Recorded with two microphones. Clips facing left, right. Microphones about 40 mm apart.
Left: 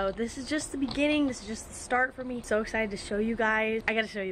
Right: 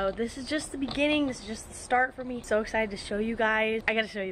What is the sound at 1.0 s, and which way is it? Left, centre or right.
Speech, right.